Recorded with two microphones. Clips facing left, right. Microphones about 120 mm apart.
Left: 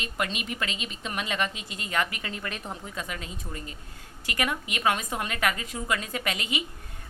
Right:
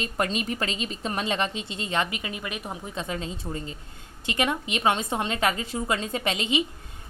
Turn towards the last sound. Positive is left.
turn(degrees=-25)  # may be behind; listen again after turning